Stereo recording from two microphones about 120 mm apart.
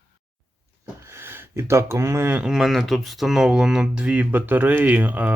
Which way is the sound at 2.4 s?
5° right (ahead or behind).